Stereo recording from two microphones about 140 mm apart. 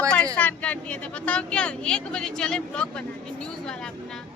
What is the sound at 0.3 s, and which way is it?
Speech, 10° left (ahead or behind).